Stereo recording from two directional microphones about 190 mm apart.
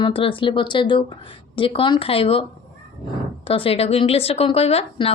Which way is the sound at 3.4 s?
30° left (ahead or behind).